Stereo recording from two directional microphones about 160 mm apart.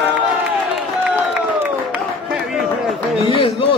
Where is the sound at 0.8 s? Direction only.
5° right (ahead or behind).